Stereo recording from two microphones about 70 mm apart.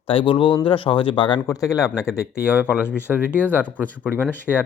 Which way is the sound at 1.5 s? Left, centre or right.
Left.